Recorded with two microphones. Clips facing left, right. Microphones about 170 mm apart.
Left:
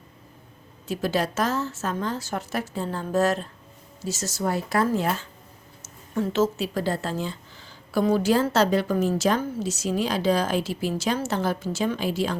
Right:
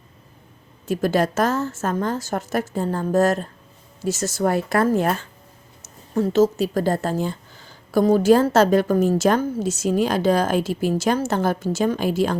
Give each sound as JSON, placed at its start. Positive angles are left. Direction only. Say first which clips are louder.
{"t": 0.9, "sound": "speech", "louder": "right 5 dB", "side_deg": -50}
{"t": 6.1, "sound": "speech", "louder": "right 6 dB", "side_deg": -40}